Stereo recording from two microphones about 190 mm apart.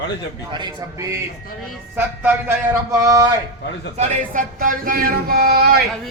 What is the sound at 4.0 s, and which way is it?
Speech, 45° right (ahead or behind).